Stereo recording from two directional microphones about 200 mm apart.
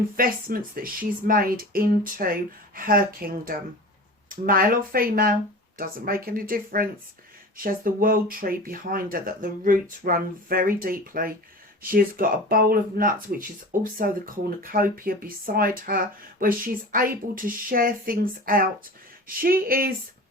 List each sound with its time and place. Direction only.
0.2 s speech: 45° right (ahead or behind)